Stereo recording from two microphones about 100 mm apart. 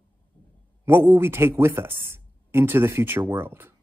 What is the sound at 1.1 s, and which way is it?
Speech, 25° right (ahead or behind).